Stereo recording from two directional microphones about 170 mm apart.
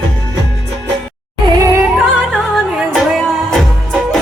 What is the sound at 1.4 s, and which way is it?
Music, 20° right (ahead or behind).